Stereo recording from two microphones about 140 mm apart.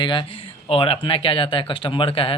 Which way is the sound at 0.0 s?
35° left (ahead or behind).